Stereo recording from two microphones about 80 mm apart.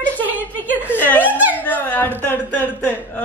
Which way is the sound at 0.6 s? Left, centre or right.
Right.